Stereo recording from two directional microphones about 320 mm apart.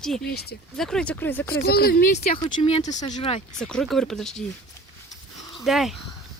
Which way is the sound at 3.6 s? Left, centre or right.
Centre.